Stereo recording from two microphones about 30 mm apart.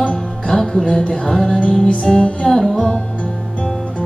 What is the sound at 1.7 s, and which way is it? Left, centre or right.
Music, left.